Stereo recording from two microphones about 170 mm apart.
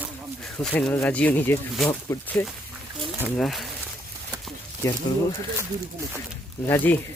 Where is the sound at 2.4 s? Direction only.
15° left (ahead or behind).